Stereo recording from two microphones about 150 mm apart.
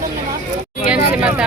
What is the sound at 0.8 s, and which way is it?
Speech, 10° right (ahead or behind).